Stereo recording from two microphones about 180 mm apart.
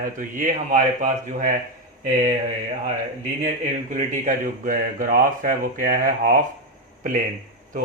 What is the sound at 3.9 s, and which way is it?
Speech, 45° right (ahead or behind).